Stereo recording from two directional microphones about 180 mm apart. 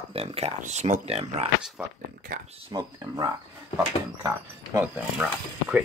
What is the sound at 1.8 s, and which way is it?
Speech, 5° right (ahead or behind).